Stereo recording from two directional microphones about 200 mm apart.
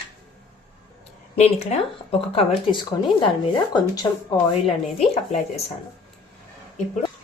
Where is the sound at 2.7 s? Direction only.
25° left (ahead or behind).